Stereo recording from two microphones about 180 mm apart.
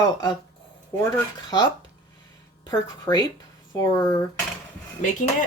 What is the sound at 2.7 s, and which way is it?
Speech, 25° left (ahead or behind).